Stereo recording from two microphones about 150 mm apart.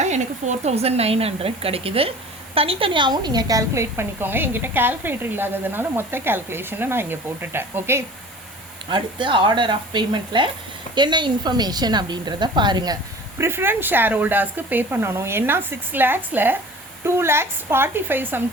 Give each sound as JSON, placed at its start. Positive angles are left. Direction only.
{"t": 0.0, "sound": "a woman's voice", "side_deg": -50}
{"t": 8.9, "sound": "a woman's voice", "side_deg": -35}
{"t": 13.4, "sound": "a woman's voice", "side_deg": -15}